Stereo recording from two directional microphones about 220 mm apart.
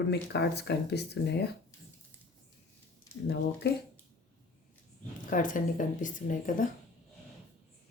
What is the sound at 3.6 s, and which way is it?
Speech, 50° left (ahead or behind).